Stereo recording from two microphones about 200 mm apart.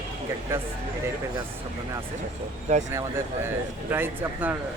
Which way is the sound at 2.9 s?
10° right (ahead or behind).